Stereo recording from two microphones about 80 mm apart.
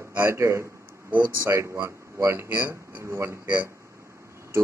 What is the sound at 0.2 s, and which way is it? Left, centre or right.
Speech, right.